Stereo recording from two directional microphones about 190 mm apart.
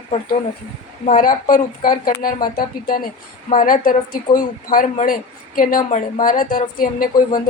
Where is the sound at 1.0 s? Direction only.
45° left (ahead or behind).